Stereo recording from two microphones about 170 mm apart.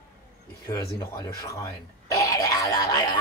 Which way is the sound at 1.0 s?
20° left (ahead or behind).